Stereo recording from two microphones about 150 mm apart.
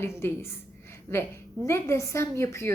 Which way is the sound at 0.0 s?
15° left (ahead or behind).